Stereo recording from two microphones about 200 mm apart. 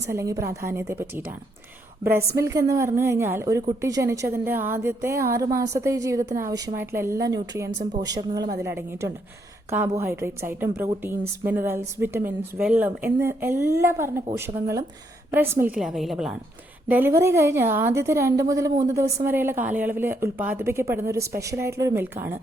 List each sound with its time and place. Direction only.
0.1 s a woman's voice: 15° right (ahead or behind)
2.4 s a woman's voice: 15° right (ahead or behind)